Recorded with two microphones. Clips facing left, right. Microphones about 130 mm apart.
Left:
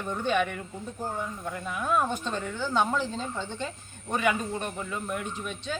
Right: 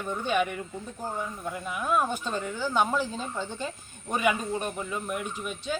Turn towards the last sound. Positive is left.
turn(degrees=-15)  # may be behind; listen again after turning